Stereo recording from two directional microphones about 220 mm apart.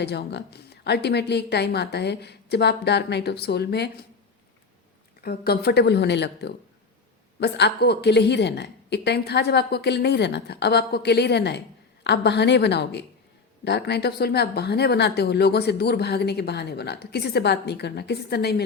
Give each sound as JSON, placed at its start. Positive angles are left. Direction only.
{"t": 0.0, "sound": "speech", "side_deg": 50}
{"t": 5.2, "sound": "speech", "side_deg": 45}